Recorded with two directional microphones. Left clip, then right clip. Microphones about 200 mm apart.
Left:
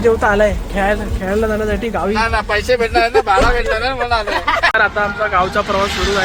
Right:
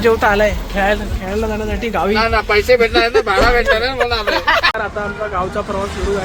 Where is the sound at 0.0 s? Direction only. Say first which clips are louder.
Even; 5° left (ahead or behind).